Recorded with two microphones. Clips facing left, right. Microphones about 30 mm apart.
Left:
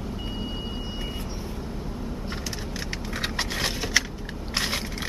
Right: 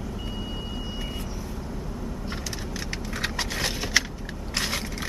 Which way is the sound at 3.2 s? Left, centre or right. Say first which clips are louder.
Even; centre.